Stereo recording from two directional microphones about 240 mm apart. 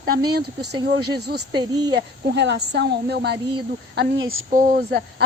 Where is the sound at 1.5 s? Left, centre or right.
Centre.